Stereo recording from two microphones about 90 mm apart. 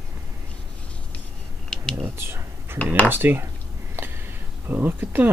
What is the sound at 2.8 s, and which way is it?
Speech, 15° left (ahead or behind).